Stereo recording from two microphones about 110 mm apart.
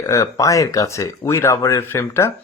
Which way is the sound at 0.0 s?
30° left (ahead or behind).